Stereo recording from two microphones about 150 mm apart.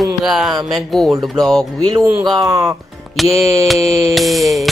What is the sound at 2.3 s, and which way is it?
Speech, 20° right (ahead or behind).